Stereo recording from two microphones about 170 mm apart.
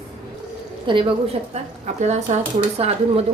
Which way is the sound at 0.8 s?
30° right (ahead or behind).